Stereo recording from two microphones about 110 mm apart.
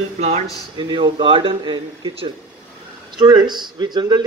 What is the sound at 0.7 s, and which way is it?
Speech, 45° right (ahead or behind).